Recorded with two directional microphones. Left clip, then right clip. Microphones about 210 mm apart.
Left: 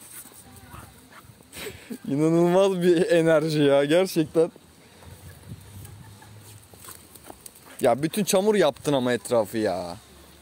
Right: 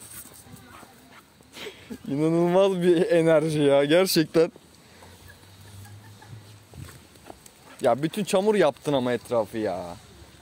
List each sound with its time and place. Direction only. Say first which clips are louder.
1.1 s speech: left 3 dB; 15° left (ahead or behind)
4.1 s speech: right 1 dB; 25° right (ahead or behind)
7.8 s speech: left 1 dB; 25° left (ahead or behind)